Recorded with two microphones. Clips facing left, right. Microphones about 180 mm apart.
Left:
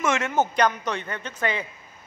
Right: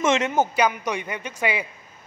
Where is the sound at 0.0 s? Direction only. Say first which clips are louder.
Right 4 dB; 20° right (ahead or behind).